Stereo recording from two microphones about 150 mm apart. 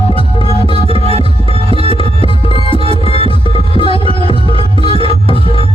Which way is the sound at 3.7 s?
35° left (ahead or behind).